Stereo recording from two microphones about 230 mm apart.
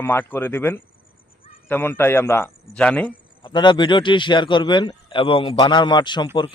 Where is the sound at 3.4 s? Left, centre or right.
Centre.